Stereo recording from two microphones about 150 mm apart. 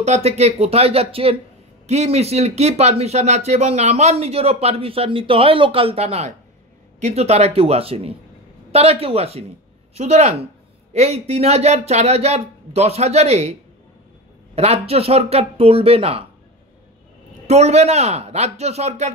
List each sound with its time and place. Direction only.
0.0 s speech: 45° right (ahead or behind)
17.5 s speech: 45° right (ahead or behind)